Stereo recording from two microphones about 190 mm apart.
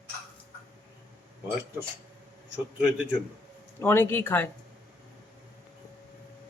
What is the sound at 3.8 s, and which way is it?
Speech, 10° left (ahead or behind).